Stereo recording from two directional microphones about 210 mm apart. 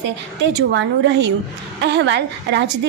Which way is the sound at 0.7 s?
60° right (ahead or behind).